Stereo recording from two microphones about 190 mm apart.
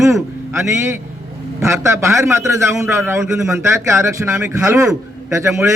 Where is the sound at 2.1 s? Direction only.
15° right (ahead or behind).